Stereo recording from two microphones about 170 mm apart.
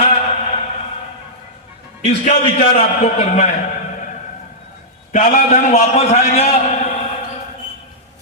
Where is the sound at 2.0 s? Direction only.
40° left (ahead or behind).